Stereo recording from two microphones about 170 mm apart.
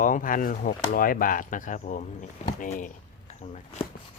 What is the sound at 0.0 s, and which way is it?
Speech, 50° left (ahead or behind).